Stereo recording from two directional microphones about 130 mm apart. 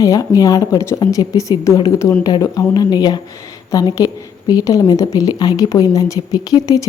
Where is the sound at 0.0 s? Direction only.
25° left (ahead or behind).